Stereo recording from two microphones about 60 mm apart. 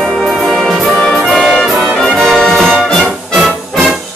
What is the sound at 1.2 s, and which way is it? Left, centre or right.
Brass instrument, centre.